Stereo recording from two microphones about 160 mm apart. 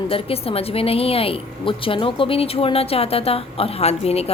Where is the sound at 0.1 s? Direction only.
35° left (ahead or behind).